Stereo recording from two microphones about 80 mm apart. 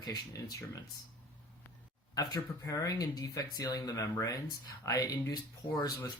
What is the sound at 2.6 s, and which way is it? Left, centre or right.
Speech, left.